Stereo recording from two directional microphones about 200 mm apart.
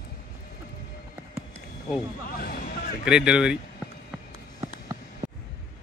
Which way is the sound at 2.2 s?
50° left (ahead or behind).